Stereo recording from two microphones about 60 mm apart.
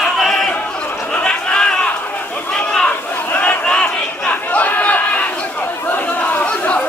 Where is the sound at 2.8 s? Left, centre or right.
Left.